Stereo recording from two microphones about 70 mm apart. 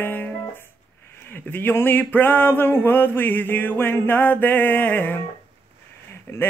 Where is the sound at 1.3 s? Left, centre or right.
Left.